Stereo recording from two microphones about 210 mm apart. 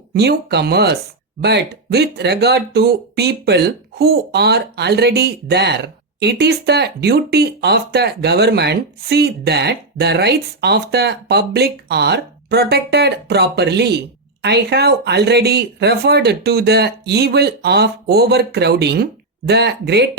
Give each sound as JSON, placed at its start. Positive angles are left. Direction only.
{"t": 0.1, "sound": "speech", "side_deg": -50}